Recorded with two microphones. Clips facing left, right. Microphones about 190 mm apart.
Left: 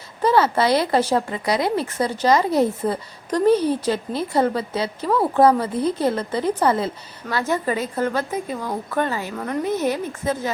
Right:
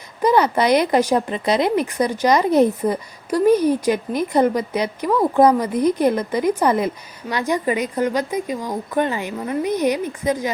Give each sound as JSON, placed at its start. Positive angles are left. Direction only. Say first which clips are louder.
{"t": 0.2, "sound": "a woman's voice", "louder": "right 1 dB", "side_deg": -15}